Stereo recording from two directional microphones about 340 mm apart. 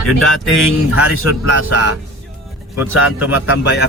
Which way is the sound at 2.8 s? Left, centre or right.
Centre.